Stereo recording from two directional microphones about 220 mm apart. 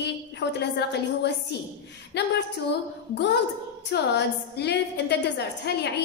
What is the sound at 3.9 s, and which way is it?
A woman's voice, 50° left (ahead or behind).